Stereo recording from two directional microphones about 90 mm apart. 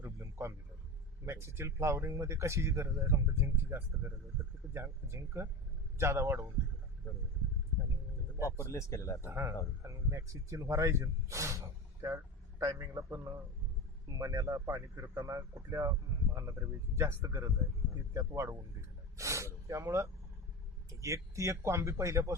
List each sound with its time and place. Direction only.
0.2 s a sound: 30° right (ahead or behind)
1.2 s a man's voice: 30° right (ahead or behind)
8.4 s speech: 35° left (ahead or behind)
9.2 s speech: 30° right (ahead or behind)
17.0 s speech: 30° right (ahead or behind)